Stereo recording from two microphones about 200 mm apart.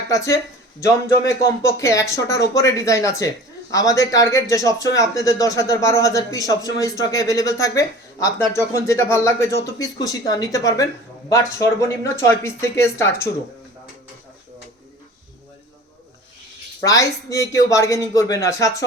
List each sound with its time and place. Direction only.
0.1 s speech: 15° left (ahead or behind)
1.6 s speech: 15° left (ahead or behind)
16.8 s speech: 15° left (ahead or behind)